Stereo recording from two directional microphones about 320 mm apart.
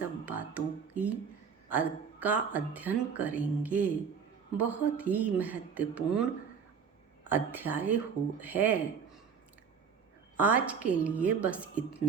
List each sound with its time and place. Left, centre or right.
0.3 s music: centre
1.7 s speech: centre
7.3 s speech: centre
10.3 s speech: centre